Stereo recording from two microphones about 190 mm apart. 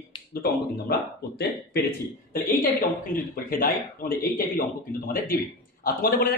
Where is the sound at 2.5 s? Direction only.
50° left (ahead or behind).